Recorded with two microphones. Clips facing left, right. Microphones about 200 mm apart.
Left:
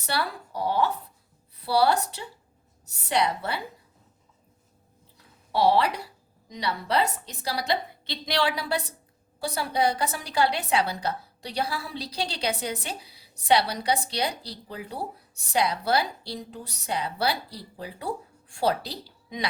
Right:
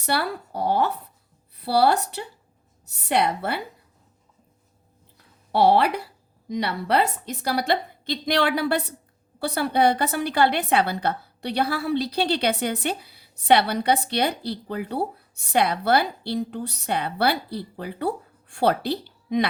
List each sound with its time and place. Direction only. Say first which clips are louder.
0.0 s a woman's voice: right 4 dB; 60° right (ahead or behind)
5.5 s a woman's voice: right 3 dB; 60° right (ahead or behind)